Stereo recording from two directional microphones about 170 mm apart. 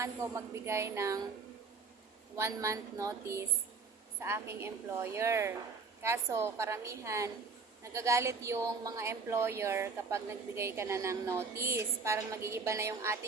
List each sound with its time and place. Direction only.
0.0 s a woman's voice: 15° right (ahead or behind)
2.3 s a woman's voice: 15° right (ahead or behind)